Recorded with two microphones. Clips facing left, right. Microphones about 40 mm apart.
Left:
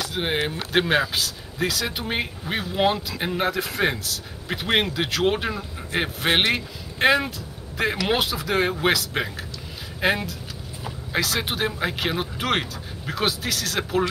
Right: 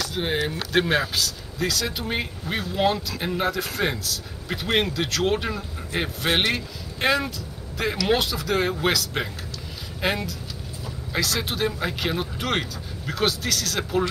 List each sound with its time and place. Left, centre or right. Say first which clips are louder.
0.1 s speech: left 2 dB; left